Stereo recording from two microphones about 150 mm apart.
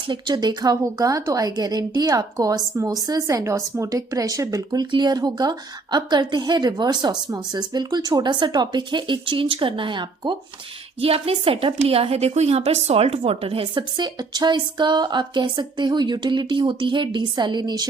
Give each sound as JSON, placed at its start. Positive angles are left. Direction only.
{"t": 0.1, "sound": "a woman's voice", "side_deg": -30}